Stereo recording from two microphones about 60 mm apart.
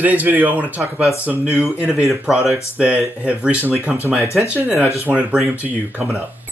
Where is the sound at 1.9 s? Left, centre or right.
Centre.